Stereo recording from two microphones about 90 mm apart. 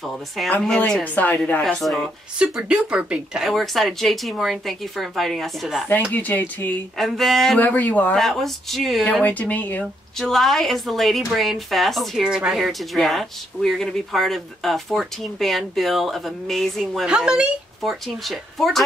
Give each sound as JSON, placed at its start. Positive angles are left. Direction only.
{"t": 0.4, "sound": "speech", "side_deg": 0}
{"t": 0.7, "sound": "speech", "side_deg": 15}
{"t": 1.6, "sound": "speech", "side_deg": 5}
{"t": 2.3, "sound": "speech", "side_deg": -10}
{"t": 6.1, "sound": "speech", "side_deg": 20}
{"t": 7.0, "sound": "speech", "side_deg": 0}
{"t": 7.5, "sound": "speech", "side_deg": 20}
{"t": 8.2, "sound": "speech", "side_deg": 0}
{"t": 9.0, "sound": "speech", "side_deg": 15}
{"t": 10.1, "sound": "speech", "side_deg": 5}
{"t": 17.1, "sound": "speech", "side_deg": -10}
{"t": 18.0, "sound": "speech", "side_deg": 0}